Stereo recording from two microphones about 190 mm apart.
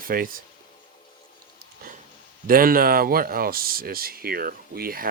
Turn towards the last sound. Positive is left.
turn(degrees=-50)  # may be behind; listen again after turning